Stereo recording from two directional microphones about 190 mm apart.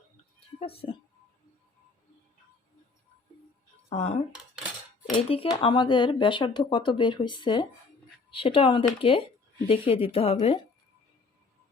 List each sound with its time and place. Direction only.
0.3 s music: 30° left (ahead or behind)
3.8 s speech: 35° left (ahead or behind)